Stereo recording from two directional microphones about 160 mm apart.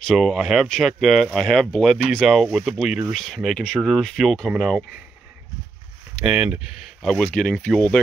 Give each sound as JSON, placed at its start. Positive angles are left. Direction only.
{"t": 0.0, "sound": "speech", "side_deg": 0}
{"t": 6.2, "sound": "speech", "side_deg": -5}